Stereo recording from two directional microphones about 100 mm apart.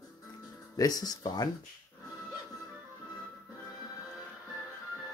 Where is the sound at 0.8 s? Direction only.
40° left (ahead or behind).